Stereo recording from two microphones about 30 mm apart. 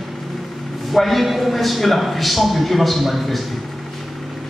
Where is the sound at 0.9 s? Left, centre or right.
Centre.